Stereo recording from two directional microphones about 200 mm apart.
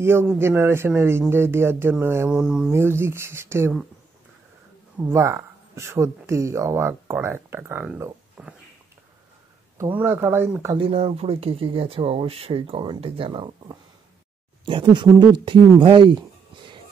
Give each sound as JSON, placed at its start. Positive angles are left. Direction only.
{"t": 0.0, "sound": "speech", "side_deg": -10}
{"t": 5.0, "sound": "speech", "side_deg": -10}
{"t": 9.8, "sound": "speech", "side_deg": -10}
{"t": 10.8, "sound": "speech", "side_deg": -30}
{"t": 15.8, "sound": "music", "side_deg": -25}